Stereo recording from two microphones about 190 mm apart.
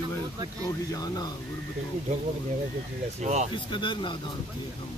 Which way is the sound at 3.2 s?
35° right (ahead or behind).